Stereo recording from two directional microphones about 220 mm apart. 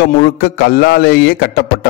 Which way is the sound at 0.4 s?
45° left (ahead or behind).